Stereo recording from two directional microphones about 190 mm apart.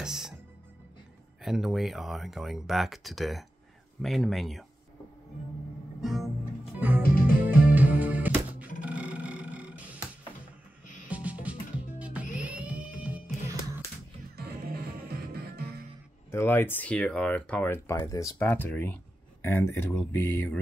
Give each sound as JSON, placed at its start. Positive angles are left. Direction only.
{"t": 0.0, "sound": "music", "side_deg": 0}
{"t": 1.4, "sound": "speech", "side_deg": 0}
{"t": 5.9, "sound": "music", "side_deg": 0}
{"t": 8.8, "sound": "guitar", "side_deg": -5}
{"t": 11.1, "sound": "music", "side_deg": -5}
{"t": 14.3, "sound": "music", "side_deg": -55}
{"t": 16.3, "sound": "speech", "side_deg": 15}